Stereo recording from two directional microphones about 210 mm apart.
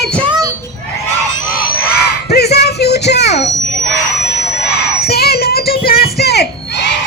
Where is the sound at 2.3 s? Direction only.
50° left (ahead or behind).